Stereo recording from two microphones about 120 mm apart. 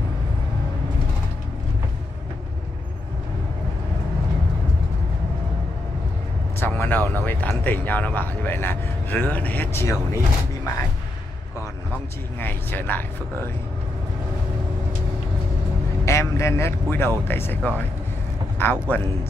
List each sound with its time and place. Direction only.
6.6 s a sound: 15° left (ahead or behind)
7.2 s speech: 15° left (ahead or behind)
12.4 s speech: 15° left (ahead or behind)
16.1 s speech: 25° left (ahead or behind)